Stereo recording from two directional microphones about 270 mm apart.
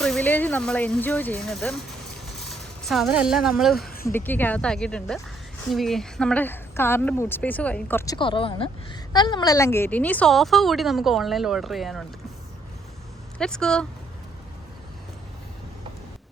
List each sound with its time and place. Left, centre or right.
0.0 s a woman's voice: centre
3.8 s a sound: left
4.1 s a woman's voice: centre
13.4 s a woman's voice: centre